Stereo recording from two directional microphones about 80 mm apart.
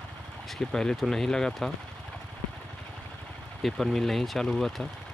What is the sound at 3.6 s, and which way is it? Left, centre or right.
Speech, centre.